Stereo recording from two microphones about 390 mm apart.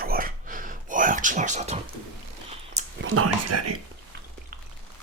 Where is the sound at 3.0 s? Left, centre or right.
Right.